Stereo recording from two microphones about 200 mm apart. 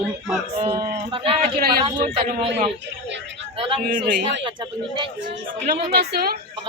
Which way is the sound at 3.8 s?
45° right (ahead or behind).